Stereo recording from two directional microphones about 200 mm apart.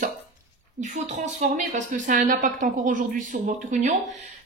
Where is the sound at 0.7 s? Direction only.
35° right (ahead or behind).